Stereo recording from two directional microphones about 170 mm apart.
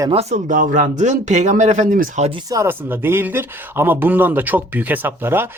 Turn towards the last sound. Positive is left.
turn(degrees=-15)  # may be behind; listen again after turning